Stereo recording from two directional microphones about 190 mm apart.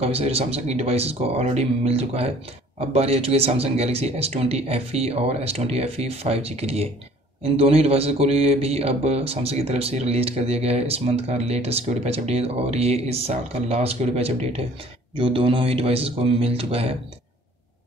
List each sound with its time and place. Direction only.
0.0 s speech: 30° right (ahead or behind)